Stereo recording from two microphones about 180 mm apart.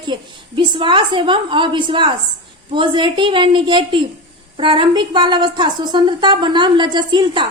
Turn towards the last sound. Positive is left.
turn(degrees=-25)  # may be behind; listen again after turning